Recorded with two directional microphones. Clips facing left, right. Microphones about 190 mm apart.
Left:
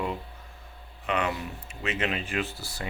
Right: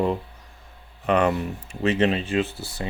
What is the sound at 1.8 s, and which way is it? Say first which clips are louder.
Speech: right 9 dB; 35° right (ahead or behind).